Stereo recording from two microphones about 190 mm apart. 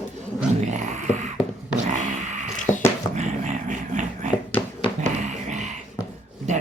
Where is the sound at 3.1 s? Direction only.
40° right (ahead or behind).